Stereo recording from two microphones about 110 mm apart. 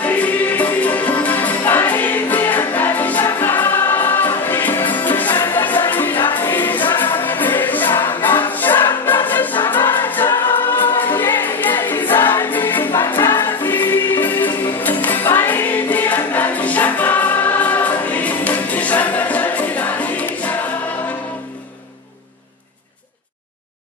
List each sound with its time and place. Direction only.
0.0 s music: 15° left (ahead or behind)
8.0 s choir: 20° left (ahead or behind)
9.8 s music: 20° left (ahead or behind)